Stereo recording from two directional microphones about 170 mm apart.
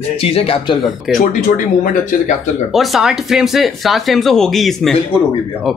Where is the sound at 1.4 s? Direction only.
50° left (ahead or behind).